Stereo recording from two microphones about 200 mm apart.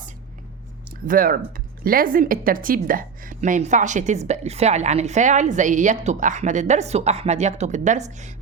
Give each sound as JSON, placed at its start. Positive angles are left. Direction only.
{"t": 0.9, "sound": "speech", "side_deg": -45}